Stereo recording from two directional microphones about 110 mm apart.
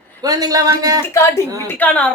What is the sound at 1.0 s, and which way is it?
A woman's voice, 25° left (ahead or behind).